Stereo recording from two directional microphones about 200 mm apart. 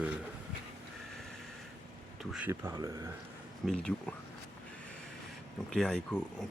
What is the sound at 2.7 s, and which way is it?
Speech, 15° right (ahead or behind).